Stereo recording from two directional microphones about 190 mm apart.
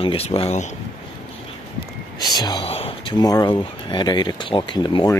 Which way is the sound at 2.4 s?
25° left (ahead or behind).